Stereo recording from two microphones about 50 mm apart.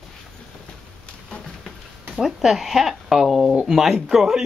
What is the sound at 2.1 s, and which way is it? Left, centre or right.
Speech, centre.